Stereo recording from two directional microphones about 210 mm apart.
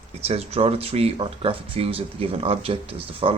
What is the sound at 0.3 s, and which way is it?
Speech, 30° right (ahead or behind).